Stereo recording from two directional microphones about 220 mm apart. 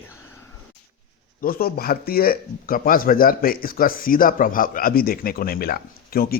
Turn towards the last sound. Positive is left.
turn(degrees=45)  # may be behind; listen again after turning